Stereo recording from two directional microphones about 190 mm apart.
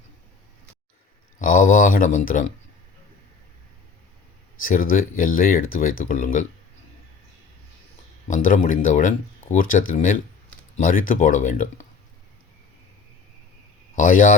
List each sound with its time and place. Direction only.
1.4 s speech: 45° left (ahead or behind)
4.6 s speech: 45° left (ahead or behind)
8.3 s speech: 40° left (ahead or behind)
13.9 s speech: 45° left (ahead or behind)